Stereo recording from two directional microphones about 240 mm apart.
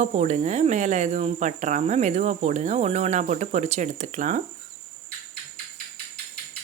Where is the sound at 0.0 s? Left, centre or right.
Right.